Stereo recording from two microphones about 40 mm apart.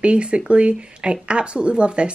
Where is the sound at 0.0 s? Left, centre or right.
Right.